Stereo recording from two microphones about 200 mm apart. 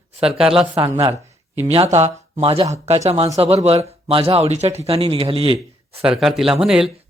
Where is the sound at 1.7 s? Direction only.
30° right (ahead or behind).